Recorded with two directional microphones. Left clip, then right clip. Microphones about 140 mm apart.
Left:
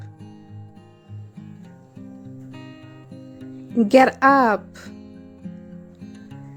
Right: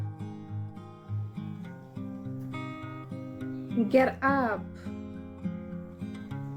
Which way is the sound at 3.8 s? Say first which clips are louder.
Left 10 dB; 90° left.